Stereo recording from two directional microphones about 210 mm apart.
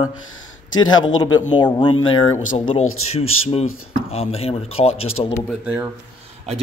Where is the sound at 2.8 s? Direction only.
90° left.